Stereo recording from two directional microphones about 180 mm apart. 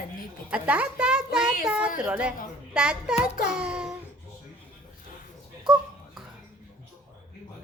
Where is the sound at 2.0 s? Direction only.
5° right (ahead or behind).